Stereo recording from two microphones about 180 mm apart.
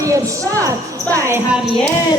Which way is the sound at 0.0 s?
15° right (ahead or behind).